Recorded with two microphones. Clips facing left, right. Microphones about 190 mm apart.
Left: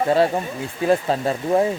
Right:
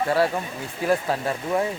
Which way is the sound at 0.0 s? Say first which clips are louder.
Left 4 dB; 25° left (ahead or behind).